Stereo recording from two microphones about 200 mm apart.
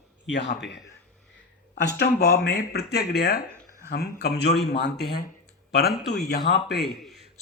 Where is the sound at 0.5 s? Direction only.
60° left (ahead or behind).